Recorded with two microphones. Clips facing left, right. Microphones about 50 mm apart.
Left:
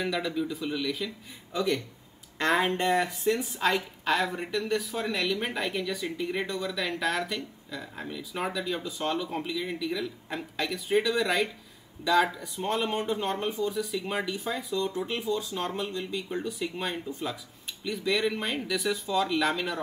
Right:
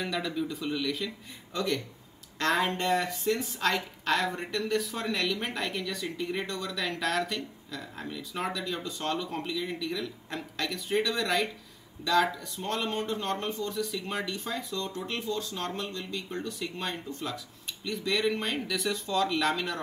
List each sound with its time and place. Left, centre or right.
0.0 s speech: centre
2.3 s speech: centre